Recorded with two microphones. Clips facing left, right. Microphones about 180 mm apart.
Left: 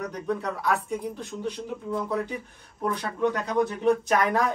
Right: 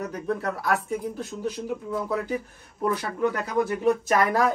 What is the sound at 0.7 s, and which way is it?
Speech, 5° right (ahead or behind).